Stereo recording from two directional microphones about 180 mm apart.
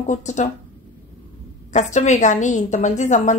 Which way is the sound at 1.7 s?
40° left (ahead or behind).